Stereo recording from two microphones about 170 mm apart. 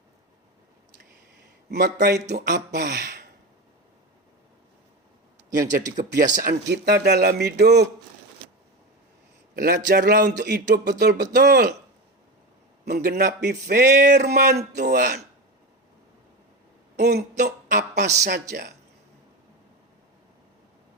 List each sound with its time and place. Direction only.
1.7 s speech: 75° right (ahead or behind)
5.7 s speech: 50° right (ahead or behind)
6.5 s speech: 75° right (ahead or behind)
9.6 s speech: 70° right (ahead or behind)
12.8 s speech: 70° right (ahead or behind)
17.0 s speech: 70° right (ahead or behind)